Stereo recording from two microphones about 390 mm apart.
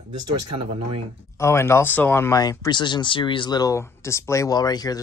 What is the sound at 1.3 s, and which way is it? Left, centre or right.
Speech, centre.